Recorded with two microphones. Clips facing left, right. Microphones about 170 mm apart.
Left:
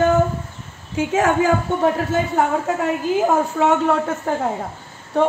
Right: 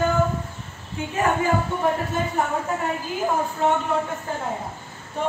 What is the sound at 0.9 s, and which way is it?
Speech, 90° left.